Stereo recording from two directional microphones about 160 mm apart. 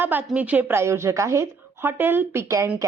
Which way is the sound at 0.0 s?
10° right (ahead or behind).